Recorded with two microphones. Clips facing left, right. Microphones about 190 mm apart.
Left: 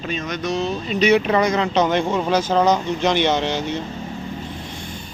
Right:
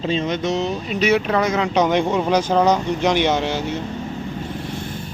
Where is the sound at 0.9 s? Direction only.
5° right (ahead or behind).